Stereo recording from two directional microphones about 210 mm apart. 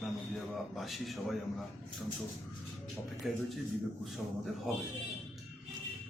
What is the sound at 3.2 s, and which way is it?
Speech, centre (ahead or behind).